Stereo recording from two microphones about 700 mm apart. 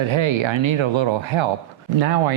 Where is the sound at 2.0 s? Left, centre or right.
Right.